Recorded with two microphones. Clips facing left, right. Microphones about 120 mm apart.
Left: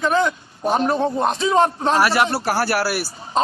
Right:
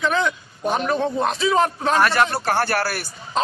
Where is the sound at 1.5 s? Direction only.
30° left (ahead or behind).